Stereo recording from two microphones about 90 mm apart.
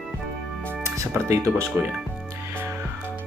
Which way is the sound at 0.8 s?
35° right (ahead or behind).